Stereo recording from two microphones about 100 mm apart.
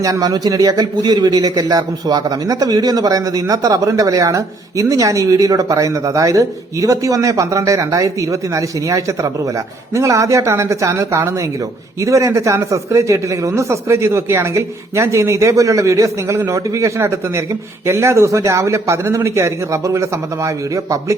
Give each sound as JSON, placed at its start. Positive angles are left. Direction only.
{"t": 0.0, "sound": "a man's voice", "side_deg": -35}